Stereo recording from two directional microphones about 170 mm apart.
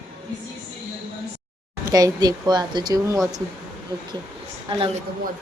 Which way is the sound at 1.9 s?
20° right (ahead or behind).